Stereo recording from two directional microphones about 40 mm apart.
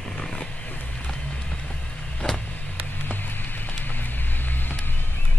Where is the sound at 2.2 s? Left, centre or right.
Left.